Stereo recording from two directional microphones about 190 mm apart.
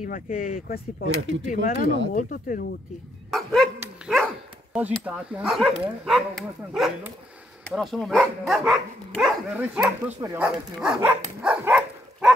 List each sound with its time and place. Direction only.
0.0 s speech: 45° left (ahead or behind)
1.0 s speech: 80° right
1.5 s speech: 45° left (ahead or behind)
3.3 s dog: centre (ahead or behind)
4.7 s speech: 5° right (ahead or behind)
11.1 s dog: 5° right (ahead or behind)